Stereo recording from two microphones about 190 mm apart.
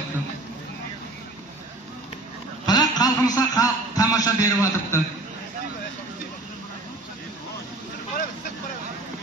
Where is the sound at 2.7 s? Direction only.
20° left (ahead or behind).